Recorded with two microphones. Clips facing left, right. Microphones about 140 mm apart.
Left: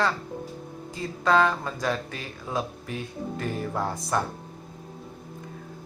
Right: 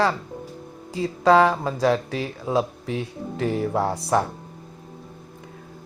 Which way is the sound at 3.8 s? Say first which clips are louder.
Right 6 dB; 75° right (ahead or behind).